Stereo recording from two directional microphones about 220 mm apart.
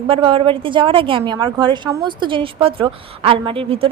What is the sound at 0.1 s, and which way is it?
A woman's voice, 25° right (ahead or behind).